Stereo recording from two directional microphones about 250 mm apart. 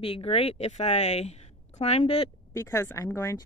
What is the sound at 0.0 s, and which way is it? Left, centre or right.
Speech, left.